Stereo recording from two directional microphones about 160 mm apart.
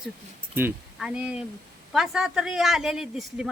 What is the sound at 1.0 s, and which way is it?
Speech, 5° right (ahead or behind).